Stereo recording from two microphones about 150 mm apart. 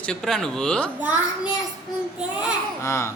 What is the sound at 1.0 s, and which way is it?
Speech, 10° right (ahead or behind).